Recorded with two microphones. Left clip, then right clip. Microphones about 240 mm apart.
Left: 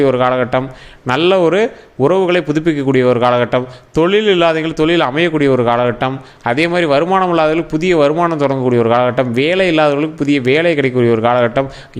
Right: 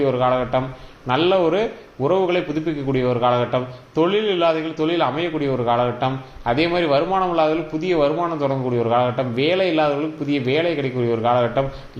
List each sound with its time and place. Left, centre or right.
0.0 s a man's voice: left